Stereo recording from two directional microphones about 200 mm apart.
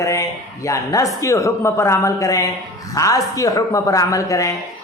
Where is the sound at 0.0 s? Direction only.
15° left (ahead or behind).